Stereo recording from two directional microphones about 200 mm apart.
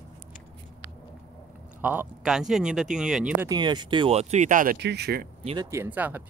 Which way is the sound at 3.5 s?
20° right (ahead or behind).